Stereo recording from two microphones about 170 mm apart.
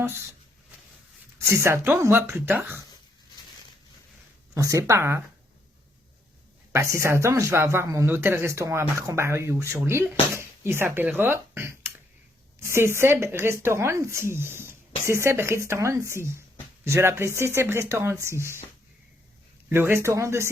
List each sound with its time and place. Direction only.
0.0 s speech: 15° right (ahead or behind)
1.4 s speech: 15° right (ahead or behind)
4.5 s speech: 20° right (ahead or behind)
6.7 s speech: 15° right (ahead or behind)
19.7 s speech: 15° right (ahead or behind)